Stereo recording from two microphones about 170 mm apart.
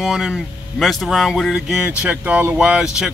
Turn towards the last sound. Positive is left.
turn(degrees=-5)  # may be behind; listen again after turning